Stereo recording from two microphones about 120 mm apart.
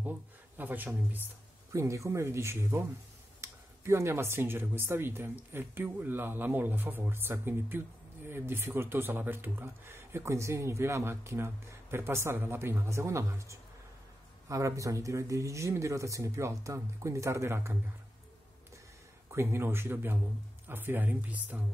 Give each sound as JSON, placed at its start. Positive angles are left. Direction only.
{"t": 0.6, "sound": "speech", "side_deg": -15}
{"t": 1.7, "sound": "speech", "side_deg": -25}
{"t": 19.3, "sound": "speech", "side_deg": -20}